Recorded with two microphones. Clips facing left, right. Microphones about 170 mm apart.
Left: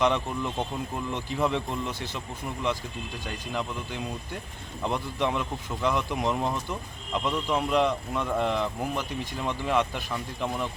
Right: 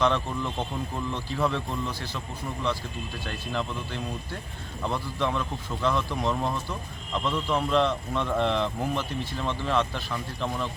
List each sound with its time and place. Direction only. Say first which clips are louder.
0.0 s speech: even; 15° left (ahead or behind)
3.2 s speech: right 1 dB; 10° left (ahead or behind)